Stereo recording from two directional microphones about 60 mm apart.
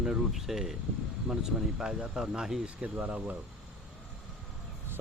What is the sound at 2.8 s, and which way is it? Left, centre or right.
Speech, right.